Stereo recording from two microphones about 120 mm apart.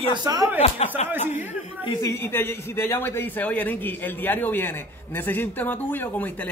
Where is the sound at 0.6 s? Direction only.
60° left (ahead or behind).